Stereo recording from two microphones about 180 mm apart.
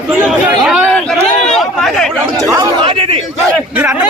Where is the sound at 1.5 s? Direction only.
Centre (ahead or behind).